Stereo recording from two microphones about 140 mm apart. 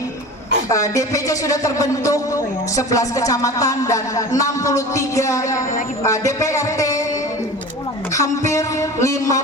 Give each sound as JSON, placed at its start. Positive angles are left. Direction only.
{"t": 0.7, "sound": "speech", "side_deg": 25}
{"t": 8.1, "sound": "speech", "side_deg": 20}